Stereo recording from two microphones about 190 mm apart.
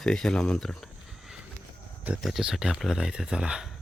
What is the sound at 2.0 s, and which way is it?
Speech, 5° right (ahead or behind).